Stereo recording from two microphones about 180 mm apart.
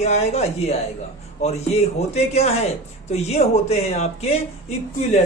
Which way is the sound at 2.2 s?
35° left (ahead or behind).